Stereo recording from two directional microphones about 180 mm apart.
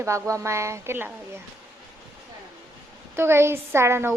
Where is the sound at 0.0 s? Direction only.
15° right (ahead or behind).